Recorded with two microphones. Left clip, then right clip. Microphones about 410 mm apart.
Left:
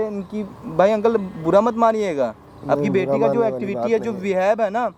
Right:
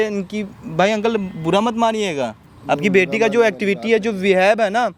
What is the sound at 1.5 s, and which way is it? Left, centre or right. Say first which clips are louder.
A man's voice: left 1 dB; right.